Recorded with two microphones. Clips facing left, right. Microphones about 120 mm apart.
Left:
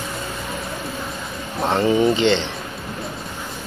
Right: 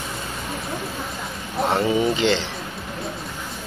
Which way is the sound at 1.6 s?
5° right (ahead or behind).